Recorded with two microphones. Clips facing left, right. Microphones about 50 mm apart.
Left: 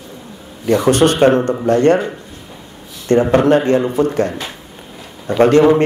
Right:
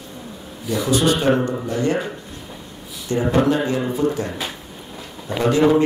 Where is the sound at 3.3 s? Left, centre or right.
Left.